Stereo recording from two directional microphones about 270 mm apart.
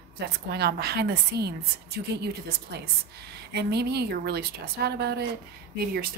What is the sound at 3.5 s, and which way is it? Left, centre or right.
Speech, right.